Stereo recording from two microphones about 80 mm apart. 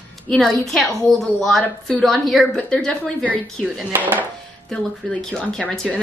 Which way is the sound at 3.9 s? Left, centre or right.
Right.